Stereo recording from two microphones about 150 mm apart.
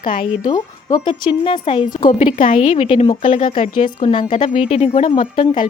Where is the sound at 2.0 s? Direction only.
60° left (ahead or behind).